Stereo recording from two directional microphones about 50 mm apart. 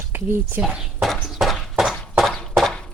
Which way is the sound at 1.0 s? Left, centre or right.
Centre.